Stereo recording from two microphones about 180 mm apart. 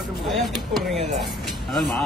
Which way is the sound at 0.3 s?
Centre (ahead or behind).